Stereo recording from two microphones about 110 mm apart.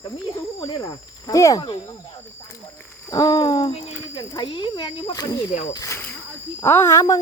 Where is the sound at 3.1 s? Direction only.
35° left (ahead or behind).